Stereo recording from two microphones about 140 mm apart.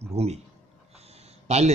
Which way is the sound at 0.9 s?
50° right (ahead or behind).